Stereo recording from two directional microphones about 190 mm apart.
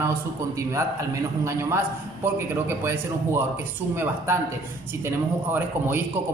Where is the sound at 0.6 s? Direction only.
15° right (ahead or behind).